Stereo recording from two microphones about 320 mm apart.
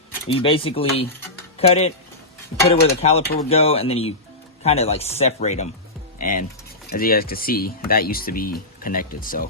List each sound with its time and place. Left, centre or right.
0.3 s speech: centre